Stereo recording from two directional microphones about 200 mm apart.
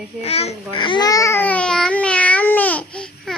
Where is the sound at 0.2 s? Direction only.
30° left (ahead or behind).